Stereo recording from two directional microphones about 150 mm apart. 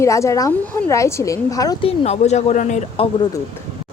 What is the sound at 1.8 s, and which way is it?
Speech, 45° left (ahead or behind).